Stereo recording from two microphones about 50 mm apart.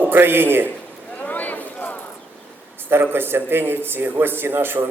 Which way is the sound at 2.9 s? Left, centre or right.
Right.